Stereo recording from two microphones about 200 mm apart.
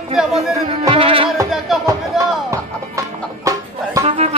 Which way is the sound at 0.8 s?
25° right (ahead or behind).